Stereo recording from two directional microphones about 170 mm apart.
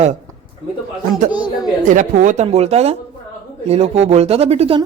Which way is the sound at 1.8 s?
45° right (ahead or behind).